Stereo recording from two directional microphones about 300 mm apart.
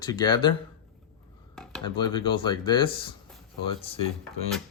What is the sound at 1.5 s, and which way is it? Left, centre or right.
Dishes, centre.